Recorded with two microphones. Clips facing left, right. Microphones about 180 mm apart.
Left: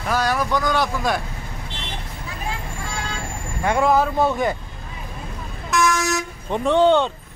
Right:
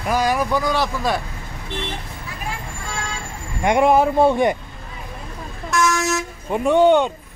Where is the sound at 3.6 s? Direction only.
20° right (ahead or behind).